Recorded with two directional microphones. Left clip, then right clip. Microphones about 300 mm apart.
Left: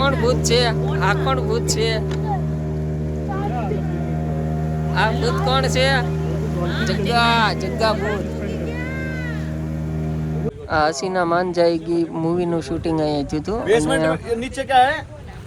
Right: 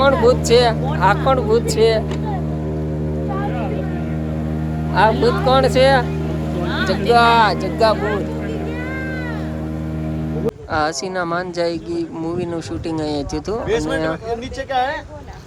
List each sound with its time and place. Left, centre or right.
0.0 s speech: centre
5.0 s speech: centre
7.1 s speech: centre
10.8 s speech: centre
14.7 s speech: left